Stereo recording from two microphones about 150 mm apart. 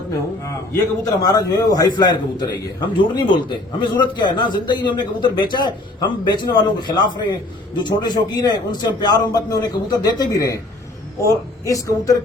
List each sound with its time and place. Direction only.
0.4 s a man's voice: 20° left (ahead or behind)